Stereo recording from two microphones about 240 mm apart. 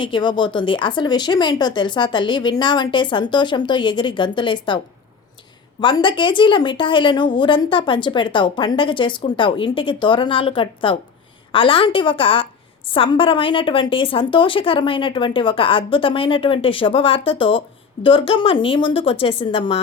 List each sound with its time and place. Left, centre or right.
0.0 s a woman's voice: centre
5.8 s a woman's voice: centre